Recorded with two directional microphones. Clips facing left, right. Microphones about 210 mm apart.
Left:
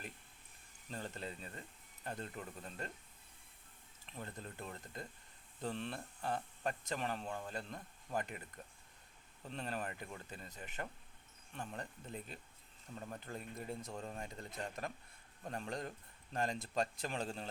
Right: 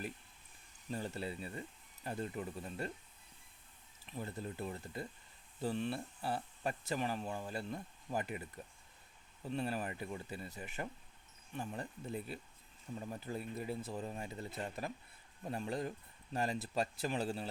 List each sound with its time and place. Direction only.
0.9 s speech: 10° right (ahead or behind)
4.0 s speech: 10° right (ahead or behind)